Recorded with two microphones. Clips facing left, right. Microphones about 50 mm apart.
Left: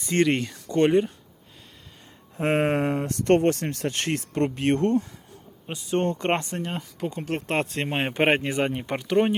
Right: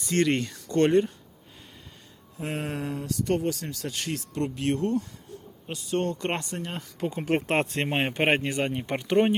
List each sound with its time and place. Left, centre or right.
0.0 s speech: left
0.3 s speech: centre
2.4 s speech: left
3.1 s speech: left
5.7 s speech: left
6.6 s speech: centre
7.4 s speech: centre